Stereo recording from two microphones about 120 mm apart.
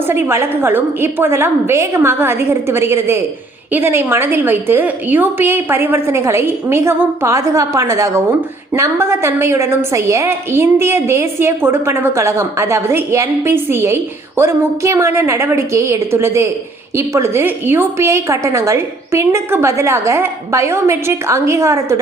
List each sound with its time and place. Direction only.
0.1 s a woman's voice: 20° right (ahead or behind)